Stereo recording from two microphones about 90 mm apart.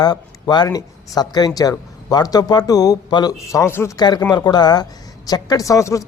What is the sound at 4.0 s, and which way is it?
Speech, 50° left (ahead or behind).